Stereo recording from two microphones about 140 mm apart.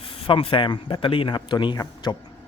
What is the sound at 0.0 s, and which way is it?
Speech, 40° left (ahead or behind).